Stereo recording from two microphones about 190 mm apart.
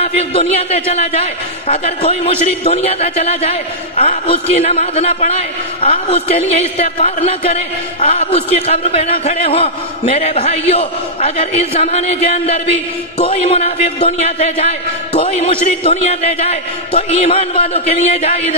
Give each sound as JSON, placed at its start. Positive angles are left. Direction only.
{"t": 0.0, "sound": "a man's voice", "side_deg": 30}